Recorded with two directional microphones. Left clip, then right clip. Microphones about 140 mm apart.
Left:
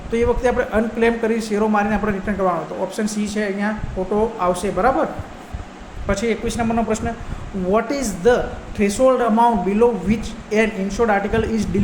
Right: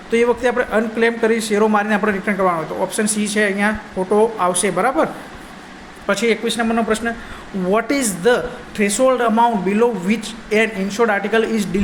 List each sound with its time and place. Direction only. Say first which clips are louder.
0.1 s a man's voice: right 2 dB; 20° right (ahead or behind)
6.1 s a man's voice: right 4 dB; 25° right (ahead or behind)